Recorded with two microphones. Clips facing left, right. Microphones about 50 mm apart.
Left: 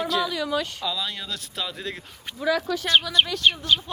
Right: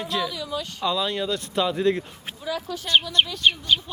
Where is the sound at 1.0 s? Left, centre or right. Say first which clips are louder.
Right 7 dB; centre.